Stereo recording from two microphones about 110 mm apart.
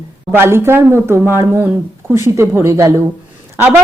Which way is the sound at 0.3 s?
20° right (ahead or behind).